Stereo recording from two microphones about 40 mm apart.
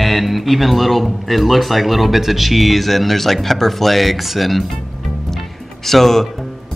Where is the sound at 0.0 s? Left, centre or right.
Centre.